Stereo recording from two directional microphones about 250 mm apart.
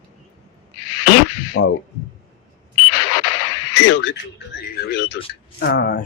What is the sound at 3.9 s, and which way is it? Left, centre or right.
Speech, left.